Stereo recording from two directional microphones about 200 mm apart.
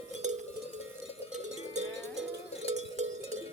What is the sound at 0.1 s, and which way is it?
Cowbell, 35° right (ahead or behind).